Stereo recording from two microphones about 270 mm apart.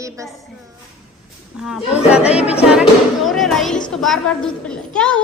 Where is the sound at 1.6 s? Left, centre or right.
Centre.